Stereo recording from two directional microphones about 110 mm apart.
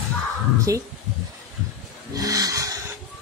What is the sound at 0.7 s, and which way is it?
Speech, 30° right (ahead or behind).